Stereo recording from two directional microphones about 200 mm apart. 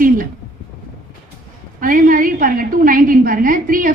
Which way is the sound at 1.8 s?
45° right (ahead or behind).